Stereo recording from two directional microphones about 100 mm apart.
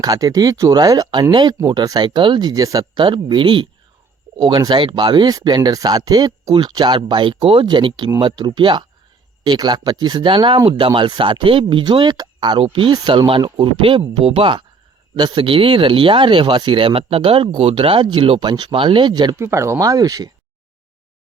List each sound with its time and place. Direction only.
0.0 s speech: 40° right (ahead or behind)
3.0 s speech: 55° right (ahead or behind)
4.4 s speech: 45° right (ahead or behind)
14.1 s speech: 70° right (ahead or behind)
15.1 s speech: 55° right (ahead or behind)
19.4 s speech: 25° right (ahead or behind)